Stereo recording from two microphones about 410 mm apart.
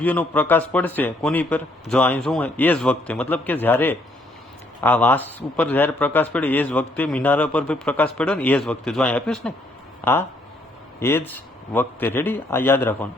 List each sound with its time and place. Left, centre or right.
0.0 s speech: centre